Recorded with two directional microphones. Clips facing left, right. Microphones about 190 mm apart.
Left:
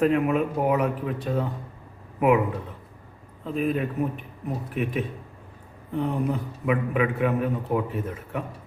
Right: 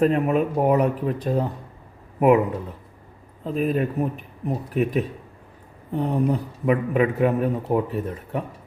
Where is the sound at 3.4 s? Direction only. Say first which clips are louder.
Right 3 dB; 40° right (ahead or behind).